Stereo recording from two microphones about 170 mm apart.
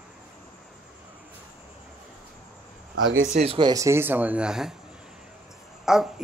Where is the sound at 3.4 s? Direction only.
30° right (ahead or behind); by 4.7 s 5° right (ahead or behind).